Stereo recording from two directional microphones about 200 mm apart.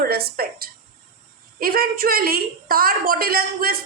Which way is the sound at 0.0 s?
50° right (ahead or behind).